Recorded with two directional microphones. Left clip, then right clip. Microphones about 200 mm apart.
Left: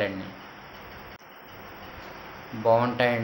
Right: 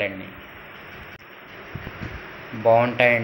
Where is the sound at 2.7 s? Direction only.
5° left (ahead or behind).